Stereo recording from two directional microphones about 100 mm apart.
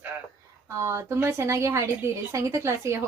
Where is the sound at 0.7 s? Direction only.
30° right (ahead or behind).